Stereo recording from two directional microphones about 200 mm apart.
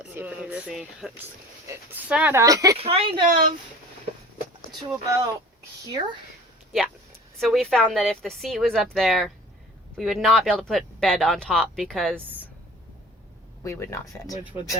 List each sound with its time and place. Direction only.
0.0 s speech: 10° right (ahead or behind)
2.7 s a woman's voice: 30° right (ahead or behind)
4.9 s a woman's voice: 15° right (ahead or behind)
7.3 s speech: centre (ahead or behind)
13.7 s speech: 15° left (ahead or behind)